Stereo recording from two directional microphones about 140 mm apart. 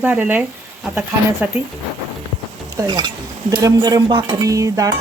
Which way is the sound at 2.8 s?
30° right (ahead or behind).